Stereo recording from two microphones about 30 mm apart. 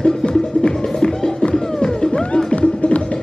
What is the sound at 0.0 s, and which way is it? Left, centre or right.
Music, left.